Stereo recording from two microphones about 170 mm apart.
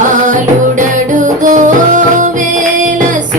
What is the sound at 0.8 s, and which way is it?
Music, 50° right (ahead or behind).